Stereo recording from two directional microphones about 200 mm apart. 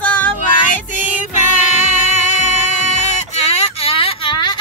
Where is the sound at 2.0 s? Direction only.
35° left (ahead or behind).